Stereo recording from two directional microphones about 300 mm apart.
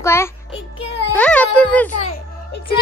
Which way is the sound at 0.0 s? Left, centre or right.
Centre.